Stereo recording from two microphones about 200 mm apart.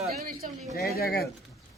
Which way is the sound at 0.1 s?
45° right (ahead or behind).